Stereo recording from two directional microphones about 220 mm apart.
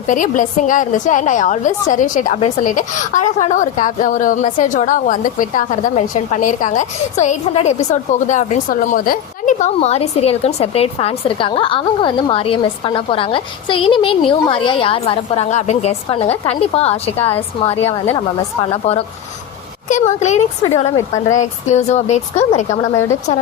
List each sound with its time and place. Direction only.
0.1 s a woman's voice: 35° left (ahead or behind)
18.6 s a woman's voice: 25° left (ahead or behind)